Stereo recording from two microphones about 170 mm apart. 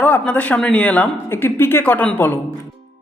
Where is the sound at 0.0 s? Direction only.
10° left (ahead or behind).